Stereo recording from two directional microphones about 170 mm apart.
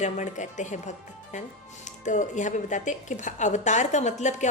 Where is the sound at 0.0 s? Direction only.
45° left (ahead or behind).